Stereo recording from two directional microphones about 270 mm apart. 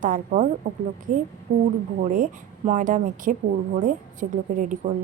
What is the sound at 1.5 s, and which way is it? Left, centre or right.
Speech, right.